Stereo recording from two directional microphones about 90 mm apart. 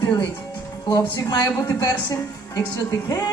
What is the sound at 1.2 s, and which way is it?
A woman's voice, 45° left (ahead or behind).